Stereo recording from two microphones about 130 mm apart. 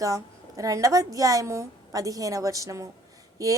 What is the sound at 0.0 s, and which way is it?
Speech, 25° right (ahead or behind).